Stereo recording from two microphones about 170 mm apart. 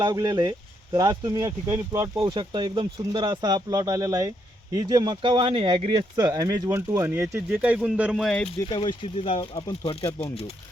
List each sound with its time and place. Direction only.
0.0 s speech: 25° right (ahead or behind); by 8.4 s centre (ahead or behind)
8.7 s speech: 25° left (ahead or behind)